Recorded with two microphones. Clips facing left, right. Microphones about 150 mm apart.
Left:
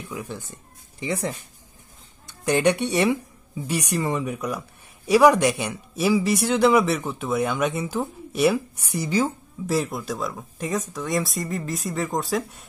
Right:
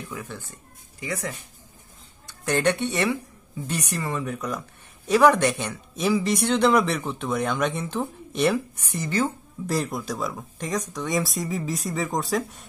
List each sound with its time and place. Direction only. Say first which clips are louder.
0.1 s speech: left 3 dB; 15° left (ahead or behind)
2.2 s speech: left 3 dB; 15° left (ahead or behind)
9.7 s speech: left 2 dB; centre (ahead or behind)